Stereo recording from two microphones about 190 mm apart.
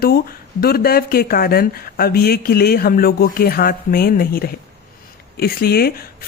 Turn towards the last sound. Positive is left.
turn(degrees=55)  # may be behind; listen again after turning